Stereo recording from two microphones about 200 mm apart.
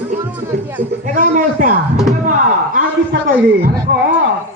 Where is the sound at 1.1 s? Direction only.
40° right (ahead or behind).